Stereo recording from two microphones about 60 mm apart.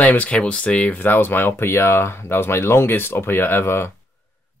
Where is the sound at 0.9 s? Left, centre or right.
Left.